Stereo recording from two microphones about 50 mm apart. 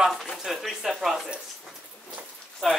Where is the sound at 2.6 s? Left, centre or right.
Centre.